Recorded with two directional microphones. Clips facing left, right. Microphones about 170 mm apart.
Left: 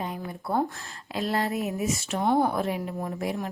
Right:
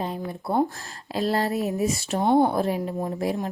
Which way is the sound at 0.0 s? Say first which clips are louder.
Right 4 dB; 30° right (ahead or behind).